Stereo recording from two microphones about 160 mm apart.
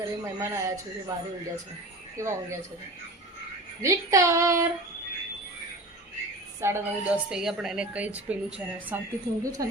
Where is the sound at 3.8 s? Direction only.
20° right (ahead or behind).